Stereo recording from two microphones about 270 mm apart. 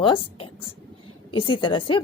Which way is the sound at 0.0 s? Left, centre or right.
Centre.